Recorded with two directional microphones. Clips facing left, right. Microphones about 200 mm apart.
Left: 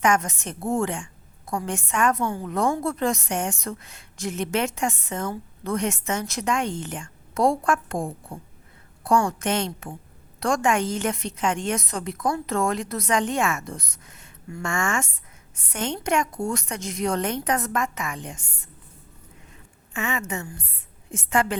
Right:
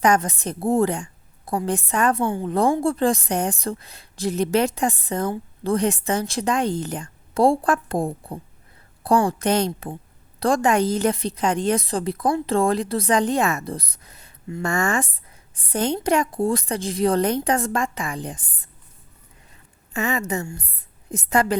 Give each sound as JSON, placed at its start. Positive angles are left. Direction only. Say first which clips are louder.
{"t": 0.0, "sound": "a woman's voice", "louder": "right 3 dB", "side_deg": -35}
{"t": 19.9, "sound": "a woman's voice", "louder": "right 5 dB", "side_deg": -35}